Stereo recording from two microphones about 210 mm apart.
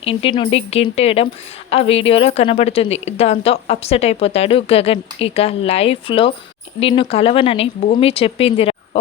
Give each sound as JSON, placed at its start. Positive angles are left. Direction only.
{"t": 0.0, "sound": "a woman's voice", "side_deg": 25}